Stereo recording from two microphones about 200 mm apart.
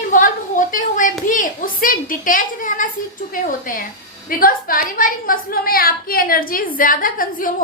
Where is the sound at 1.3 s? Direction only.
40° left (ahead or behind).